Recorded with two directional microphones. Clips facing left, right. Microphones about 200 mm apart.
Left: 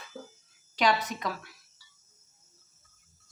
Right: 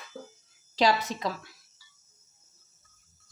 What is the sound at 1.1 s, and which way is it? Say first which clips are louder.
Speech: right 2 dB; 25° right (ahead or behind).